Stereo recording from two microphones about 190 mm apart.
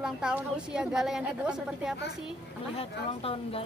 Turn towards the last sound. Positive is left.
turn(degrees=30)  # may be behind; listen again after turning